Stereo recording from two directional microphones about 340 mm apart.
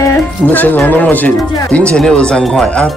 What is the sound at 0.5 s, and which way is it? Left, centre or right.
Speech, centre.